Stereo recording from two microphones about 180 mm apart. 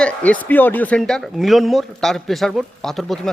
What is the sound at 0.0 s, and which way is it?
A man's voice, 10° left (ahead or behind).